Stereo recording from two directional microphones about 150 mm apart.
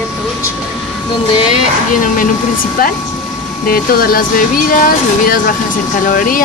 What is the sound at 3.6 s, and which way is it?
Speech, 80° left.